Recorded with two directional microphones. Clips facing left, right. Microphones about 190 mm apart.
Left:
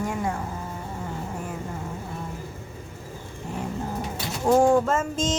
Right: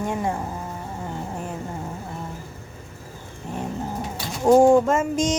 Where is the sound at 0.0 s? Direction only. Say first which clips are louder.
Right 2 dB; 25° right (ahead or behind).